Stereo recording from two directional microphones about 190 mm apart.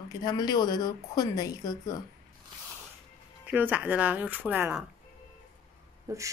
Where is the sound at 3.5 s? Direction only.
10° right (ahead or behind).